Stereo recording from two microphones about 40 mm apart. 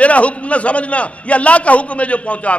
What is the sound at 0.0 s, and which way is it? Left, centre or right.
A man's voice, left.